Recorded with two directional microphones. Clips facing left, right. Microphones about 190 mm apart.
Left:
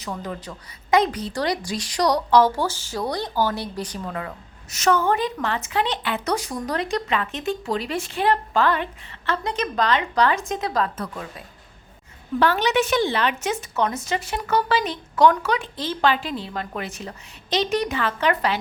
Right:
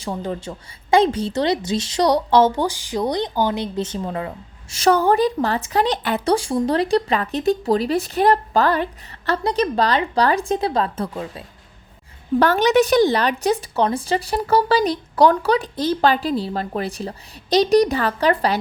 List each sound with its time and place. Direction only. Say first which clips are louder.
0.0 s a woman's voice: right 5 dB; 30° right (ahead or behind)
12.4 s a woman's voice: right 5 dB; 45° right (ahead or behind)